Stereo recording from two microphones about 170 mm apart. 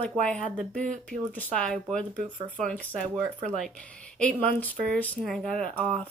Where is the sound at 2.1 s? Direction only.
50° right (ahead or behind).